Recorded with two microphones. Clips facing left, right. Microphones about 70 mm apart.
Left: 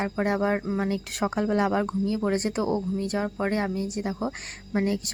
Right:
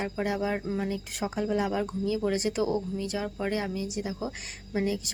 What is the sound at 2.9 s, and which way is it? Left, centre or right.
Speech, left.